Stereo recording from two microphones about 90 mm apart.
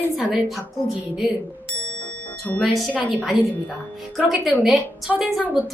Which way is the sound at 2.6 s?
Centre (ahead or behind).